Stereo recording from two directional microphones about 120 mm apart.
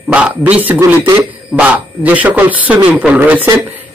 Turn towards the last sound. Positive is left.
turn(degrees=-15)  # may be behind; listen again after turning